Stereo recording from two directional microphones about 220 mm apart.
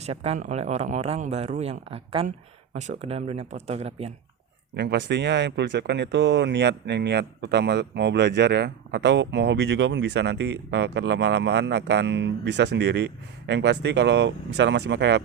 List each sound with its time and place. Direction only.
0.0 s speech: 30° right (ahead or behind)
4.8 s speech: 50° right (ahead or behind)